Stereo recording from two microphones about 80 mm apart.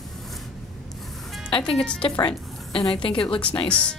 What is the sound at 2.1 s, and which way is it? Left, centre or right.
A woman's voice, left.